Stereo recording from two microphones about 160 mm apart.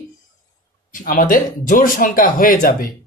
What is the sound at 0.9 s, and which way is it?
Speech, 55° left (ahead or behind).